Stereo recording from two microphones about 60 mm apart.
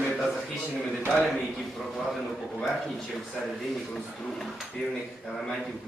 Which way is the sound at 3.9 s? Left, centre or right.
Centre.